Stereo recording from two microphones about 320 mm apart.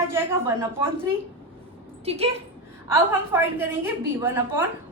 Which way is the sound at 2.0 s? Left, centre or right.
Centre.